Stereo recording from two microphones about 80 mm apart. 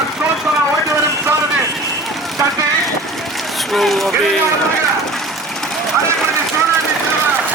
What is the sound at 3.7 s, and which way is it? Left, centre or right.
Speech, centre.